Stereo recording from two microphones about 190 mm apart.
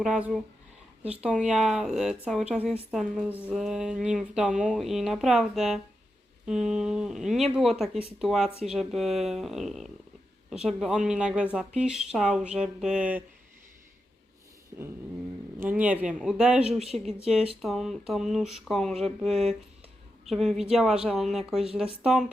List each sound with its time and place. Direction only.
0.0 s speech: 5° right (ahead or behind)
15.6 s speech: 5° right (ahead or behind)